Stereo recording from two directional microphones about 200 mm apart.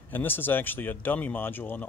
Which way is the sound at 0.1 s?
10° left (ahead or behind).